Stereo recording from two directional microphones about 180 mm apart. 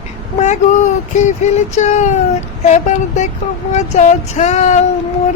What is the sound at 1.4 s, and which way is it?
Female singing, 40° left (ahead or behind).